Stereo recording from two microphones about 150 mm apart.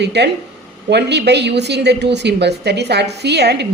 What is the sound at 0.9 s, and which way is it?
Speech, 90° right.